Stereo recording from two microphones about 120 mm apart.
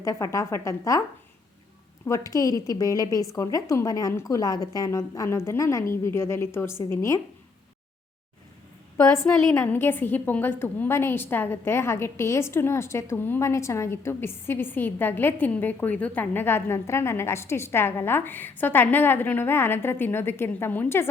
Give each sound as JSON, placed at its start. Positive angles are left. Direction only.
{"t": 0.0, "sound": "a woman's voice", "side_deg": 25}
{"t": 2.0, "sound": "a woman's voice", "side_deg": 25}
{"t": 9.0, "sound": "a woman's voice", "side_deg": 25}